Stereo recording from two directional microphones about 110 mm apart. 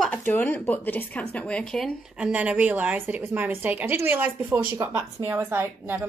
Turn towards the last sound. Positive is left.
turn(degrees=-20)  # may be behind; listen again after turning